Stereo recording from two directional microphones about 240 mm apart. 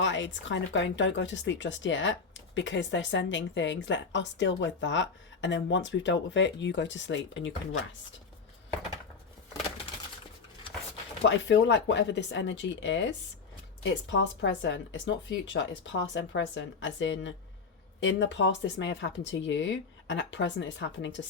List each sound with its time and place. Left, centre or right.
0.0 s speech: left
11.3 s speech: left